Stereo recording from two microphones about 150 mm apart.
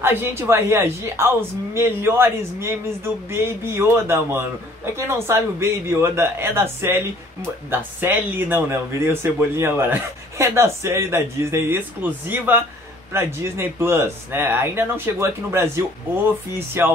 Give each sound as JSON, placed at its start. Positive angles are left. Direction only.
{"t": 0.0, "sound": "speech", "side_deg": -15}